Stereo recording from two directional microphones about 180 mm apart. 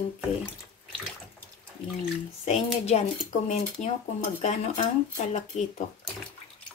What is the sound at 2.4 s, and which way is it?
Speech, 35° left (ahead or behind).